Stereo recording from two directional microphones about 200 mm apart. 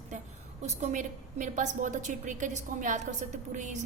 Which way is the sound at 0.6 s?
35° right (ahead or behind).